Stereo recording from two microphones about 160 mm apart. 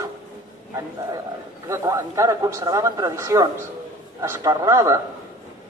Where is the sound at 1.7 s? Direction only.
20° right (ahead or behind).